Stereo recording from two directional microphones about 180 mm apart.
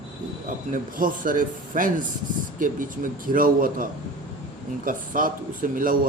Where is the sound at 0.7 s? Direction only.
50° right (ahead or behind).